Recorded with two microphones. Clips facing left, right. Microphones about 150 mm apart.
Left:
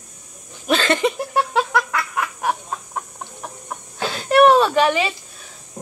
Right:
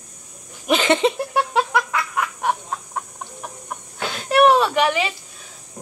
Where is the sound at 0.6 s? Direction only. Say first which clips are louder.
Right 1 dB; 15° right (ahead or behind).